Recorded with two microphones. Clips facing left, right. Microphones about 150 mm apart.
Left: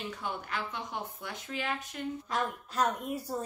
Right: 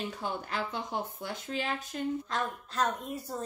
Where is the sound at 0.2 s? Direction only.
35° right (ahead or behind).